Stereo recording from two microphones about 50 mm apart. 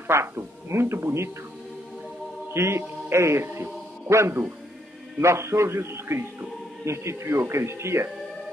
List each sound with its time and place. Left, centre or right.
0.1 s a man's voice: right
2.5 s speech: right
4.1 s a man's voice: right
6.8 s speech: right